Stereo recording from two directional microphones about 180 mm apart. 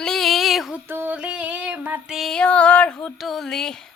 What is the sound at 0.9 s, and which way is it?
Female singing, 10° right (ahead or behind).